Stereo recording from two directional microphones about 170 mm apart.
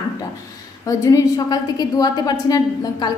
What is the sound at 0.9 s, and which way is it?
A woman's voice, 20° left (ahead or behind).